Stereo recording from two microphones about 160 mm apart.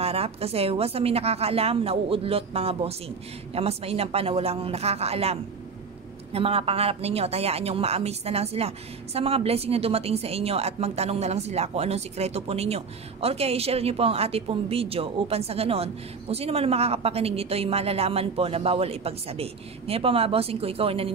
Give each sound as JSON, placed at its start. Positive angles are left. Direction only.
{"t": 0.0, "sound": "a woman's voice", "side_deg": -40}